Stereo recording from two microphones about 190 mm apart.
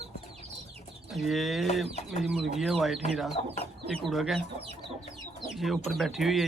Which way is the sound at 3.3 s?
35° left (ahead or behind).